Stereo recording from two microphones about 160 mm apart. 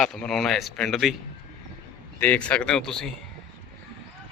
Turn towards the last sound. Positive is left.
turn(degrees=5)  # may be behind; listen again after turning